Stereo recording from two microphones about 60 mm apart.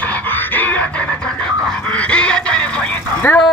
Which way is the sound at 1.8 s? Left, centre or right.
Centre.